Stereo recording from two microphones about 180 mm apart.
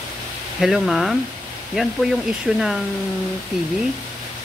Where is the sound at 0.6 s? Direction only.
Centre (ahead or behind).